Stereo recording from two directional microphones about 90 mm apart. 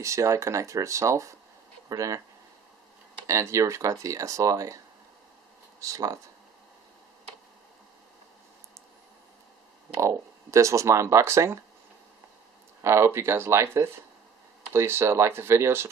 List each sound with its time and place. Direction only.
0.0 s speech: 35° right (ahead or behind)
3.3 s speech: 35° right (ahead or behind)
5.8 s speech: 40° right (ahead or behind)
9.9 s speech: 35° right (ahead or behind)
12.8 s speech: 30° right (ahead or behind)